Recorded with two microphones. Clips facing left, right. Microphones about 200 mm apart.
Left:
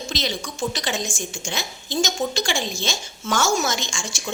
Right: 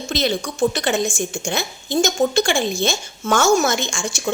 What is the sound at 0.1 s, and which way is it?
A woman's voice, 55° right (ahead or behind).